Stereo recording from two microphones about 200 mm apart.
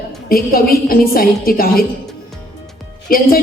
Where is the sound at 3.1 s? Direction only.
45° left (ahead or behind).